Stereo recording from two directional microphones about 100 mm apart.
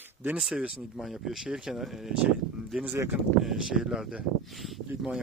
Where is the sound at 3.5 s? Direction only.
5° right (ahead or behind).